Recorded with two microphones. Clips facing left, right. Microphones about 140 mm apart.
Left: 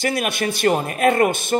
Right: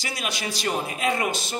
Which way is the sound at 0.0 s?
55° left (ahead or behind).